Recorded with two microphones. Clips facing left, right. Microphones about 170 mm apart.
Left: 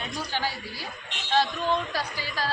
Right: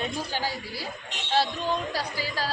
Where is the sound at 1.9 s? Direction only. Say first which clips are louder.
Right 1 dB; 10° right (ahead or behind).